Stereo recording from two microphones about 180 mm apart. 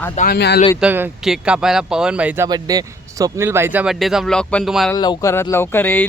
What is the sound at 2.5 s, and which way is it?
Speech, 20° right (ahead or behind).